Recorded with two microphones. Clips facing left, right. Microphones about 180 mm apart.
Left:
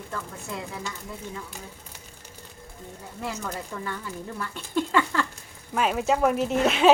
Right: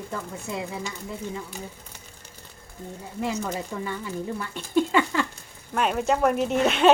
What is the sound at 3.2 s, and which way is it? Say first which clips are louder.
Speech: right 4 dB; 20° right (ahead or behind).